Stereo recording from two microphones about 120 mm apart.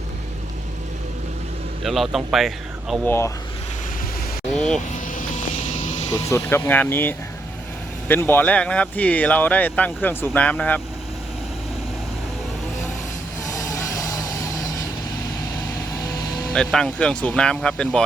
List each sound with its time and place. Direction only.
1.8 s speech: centre (ahead or behind)
3.0 s speech: 20° left (ahead or behind)
4.5 s vehicle: 5° left (ahead or behind)
5.1 s vehicle: 90° left
6.1 s speech: 25° left (ahead or behind)
13.5 s music: 25° left (ahead or behind)
16.5 s speech: 5° left (ahead or behind)